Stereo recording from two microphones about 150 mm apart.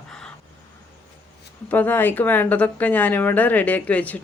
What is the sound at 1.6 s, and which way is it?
Speech, 10° left (ahead or behind).